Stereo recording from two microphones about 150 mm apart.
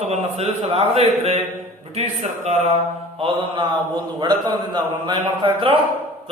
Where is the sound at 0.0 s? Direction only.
45° right (ahead or behind).